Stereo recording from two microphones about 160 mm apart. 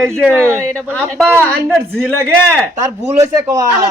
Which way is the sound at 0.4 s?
15° right (ahead or behind).